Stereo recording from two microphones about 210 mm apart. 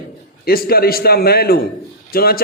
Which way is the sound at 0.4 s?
45° left (ahead or behind).